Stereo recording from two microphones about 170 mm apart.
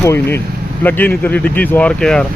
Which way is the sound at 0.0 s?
15° left (ahead or behind).